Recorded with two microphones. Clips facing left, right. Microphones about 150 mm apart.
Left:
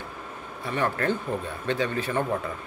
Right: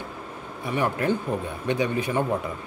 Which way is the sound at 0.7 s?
15° right (ahead or behind).